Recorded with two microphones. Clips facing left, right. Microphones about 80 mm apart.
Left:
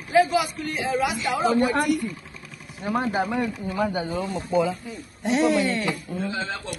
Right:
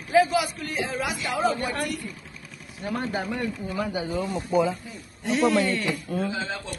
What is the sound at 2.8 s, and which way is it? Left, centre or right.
Speech, centre.